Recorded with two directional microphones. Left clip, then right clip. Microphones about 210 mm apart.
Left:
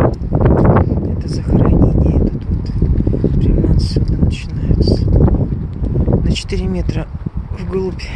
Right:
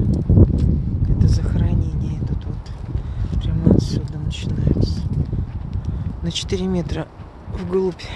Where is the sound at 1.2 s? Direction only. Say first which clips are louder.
Left 10 dB; centre (ahead or behind).